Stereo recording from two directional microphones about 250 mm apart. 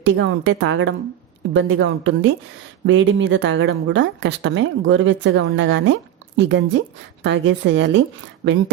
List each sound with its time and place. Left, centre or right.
0.0 s speech: right